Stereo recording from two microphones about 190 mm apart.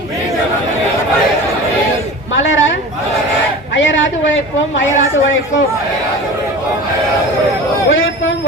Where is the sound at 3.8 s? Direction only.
80° left.